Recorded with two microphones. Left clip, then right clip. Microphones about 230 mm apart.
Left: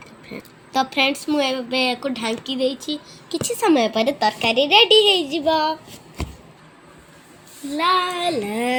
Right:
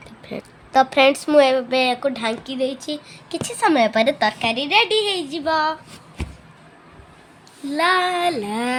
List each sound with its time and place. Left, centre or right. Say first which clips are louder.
0.7 s a woman's voice: right 5 dB; right
3.2 s a woman's voice: even; right
7.8 s speech: right 1 dB; right